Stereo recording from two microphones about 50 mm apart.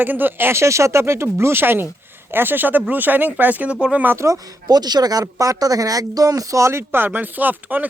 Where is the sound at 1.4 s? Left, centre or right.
Right.